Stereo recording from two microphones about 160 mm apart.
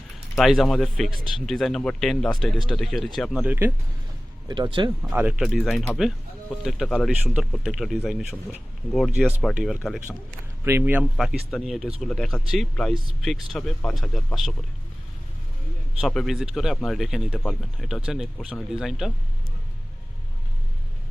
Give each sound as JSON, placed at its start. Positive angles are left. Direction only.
{"t": 0.3, "sound": "speech", "side_deg": 0}
{"t": 4.4, "sound": "speech", "side_deg": -25}
{"t": 5.1, "sound": "speech", "side_deg": -5}
{"t": 10.6, "sound": "speech", "side_deg": -15}
{"t": 11.2, "sound": "speech", "side_deg": 0}
{"t": 16.0, "sound": "speech", "side_deg": 0}